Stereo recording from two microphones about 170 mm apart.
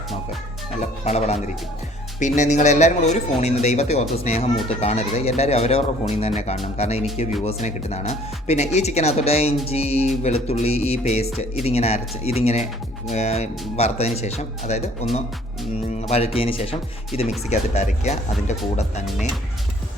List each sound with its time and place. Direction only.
0.8 s a man's voice: 40° left (ahead or behind)
16.0 s speech: 35° left (ahead or behind)